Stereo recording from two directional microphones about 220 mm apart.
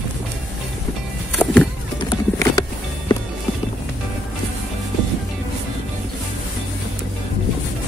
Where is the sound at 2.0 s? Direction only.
20° left (ahead or behind).